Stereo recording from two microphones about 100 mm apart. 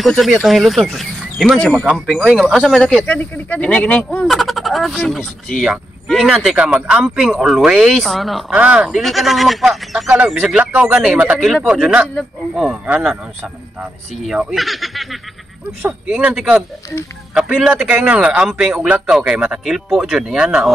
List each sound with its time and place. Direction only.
0.0 s speech: centre (ahead or behind)
3.0 s speech: 15° left (ahead or behind)
4.1 s speech: centre (ahead or behind)
8.5 s speech: 10° right (ahead or behind)
10.1 s speech: 15° right (ahead or behind)
14.2 s speech: 5° right (ahead or behind)
15.8 s speech: 15° right (ahead or behind)
17.3 s speech: centre (ahead or behind)